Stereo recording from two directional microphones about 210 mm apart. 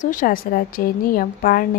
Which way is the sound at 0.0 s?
40° left (ahead or behind).